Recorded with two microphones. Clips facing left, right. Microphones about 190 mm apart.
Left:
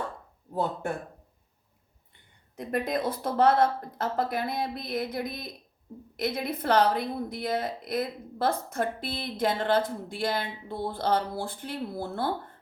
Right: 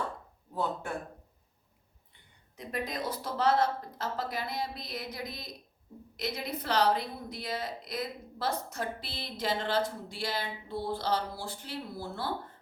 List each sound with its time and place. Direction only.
2.6 s a woman's voice: 55° left (ahead or behind)